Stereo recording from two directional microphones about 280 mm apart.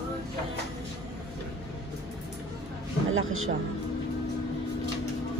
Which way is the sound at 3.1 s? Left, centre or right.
Right.